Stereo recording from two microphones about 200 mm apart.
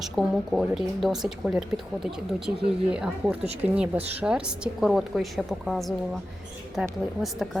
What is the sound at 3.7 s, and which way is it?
A woman's voice, 5° right (ahead or behind).